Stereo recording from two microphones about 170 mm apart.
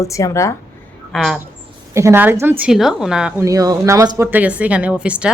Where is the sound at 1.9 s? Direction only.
15° right (ahead or behind).